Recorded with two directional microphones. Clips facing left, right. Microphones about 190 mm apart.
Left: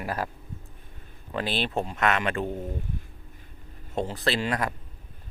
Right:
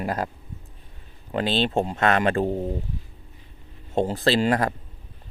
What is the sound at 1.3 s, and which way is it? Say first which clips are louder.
Speech: right 5 dB; 25° right (ahead or behind).